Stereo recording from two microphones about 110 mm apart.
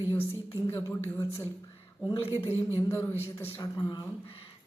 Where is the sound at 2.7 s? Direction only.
20° left (ahead or behind).